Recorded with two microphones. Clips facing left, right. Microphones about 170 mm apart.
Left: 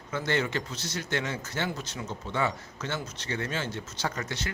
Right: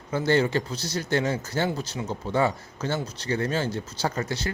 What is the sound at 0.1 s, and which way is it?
Speech, 35° right (ahead or behind).